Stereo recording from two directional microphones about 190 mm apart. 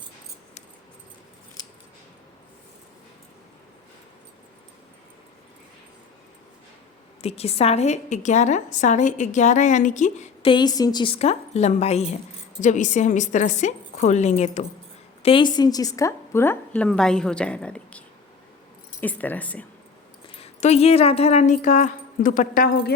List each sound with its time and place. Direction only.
7.2 s a woman's voice: 35° left (ahead or behind); by 19.6 s 10° left (ahead or behind)
20.2 s speech: 30° left (ahead or behind); by 23.0 s 50° left (ahead or behind)